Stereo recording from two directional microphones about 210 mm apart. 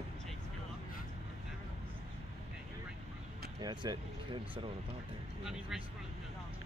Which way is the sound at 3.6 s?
20° right (ahead or behind).